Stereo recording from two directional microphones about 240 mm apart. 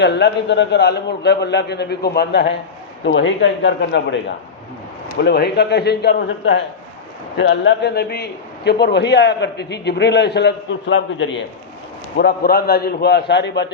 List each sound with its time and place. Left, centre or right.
0.0 s a man's voice: left
5.2 s a man's voice: left